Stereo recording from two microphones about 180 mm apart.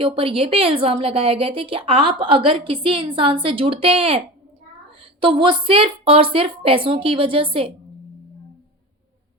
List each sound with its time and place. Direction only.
0.0 s a woman's voice: 30° right (ahead or behind)